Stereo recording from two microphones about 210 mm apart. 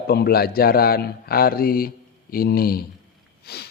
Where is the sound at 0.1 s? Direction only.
50° left (ahead or behind).